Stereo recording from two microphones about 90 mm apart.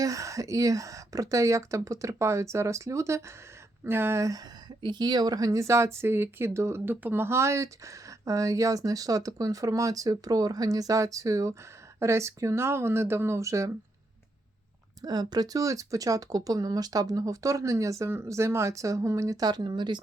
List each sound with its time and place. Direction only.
0.0 s speech: 35° right (ahead or behind)
4.8 s speech: 55° right (ahead or behind); by 13.7 s 35° right (ahead or behind)
15.0 s speech: 50° right (ahead or behind)